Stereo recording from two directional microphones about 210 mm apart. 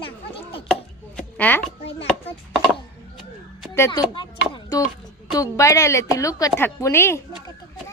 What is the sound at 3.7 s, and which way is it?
A woman's voice, 15° left (ahead or behind).